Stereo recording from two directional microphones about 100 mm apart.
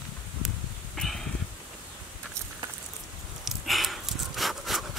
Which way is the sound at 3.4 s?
Centre (ahead or behind).